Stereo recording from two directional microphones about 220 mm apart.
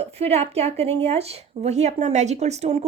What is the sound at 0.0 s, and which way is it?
Speech, 30° right (ahead or behind).